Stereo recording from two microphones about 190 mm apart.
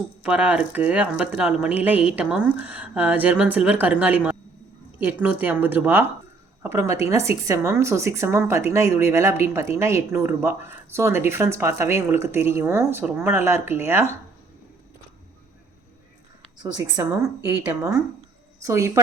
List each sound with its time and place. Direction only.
0.2 s a woman's voice: 5° right (ahead or behind)
17.0 s speech: 15° right (ahead or behind)